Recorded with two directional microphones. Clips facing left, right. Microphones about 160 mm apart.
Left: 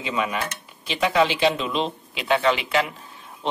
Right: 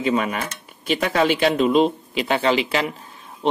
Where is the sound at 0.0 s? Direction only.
45° right (ahead or behind).